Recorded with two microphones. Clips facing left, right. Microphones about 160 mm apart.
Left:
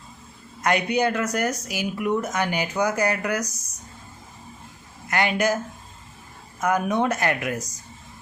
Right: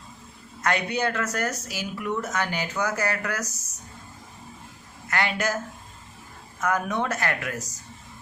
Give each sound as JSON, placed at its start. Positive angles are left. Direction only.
{"t": 0.6, "sound": "speech", "side_deg": 15}
{"t": 5.0, "sound": "speech", "side_deg": 20}
{"t": 6.6, "sound": "speech", "side_deg": 15}